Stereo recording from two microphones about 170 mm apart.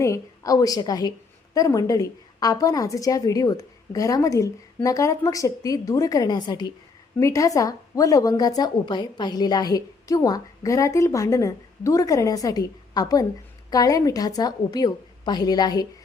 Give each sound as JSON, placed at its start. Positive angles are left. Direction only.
{"t": 0.0, "sound": "a woman's voice", "side_deg": 20}